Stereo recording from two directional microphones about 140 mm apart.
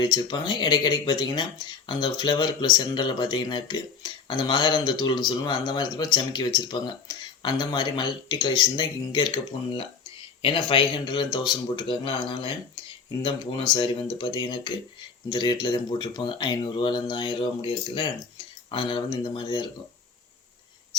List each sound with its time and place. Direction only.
0.0 s speech: 30° left (ahead or behind)